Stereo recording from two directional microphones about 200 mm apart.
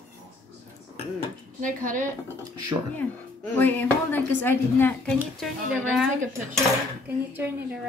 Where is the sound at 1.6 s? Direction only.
40° right (ahead or behind).